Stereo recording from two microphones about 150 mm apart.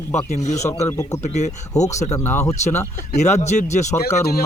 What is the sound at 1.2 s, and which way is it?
Speech, 50° left (ahead or behind).